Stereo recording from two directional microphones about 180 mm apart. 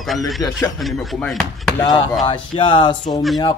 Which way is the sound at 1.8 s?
25° left (ahead or behind).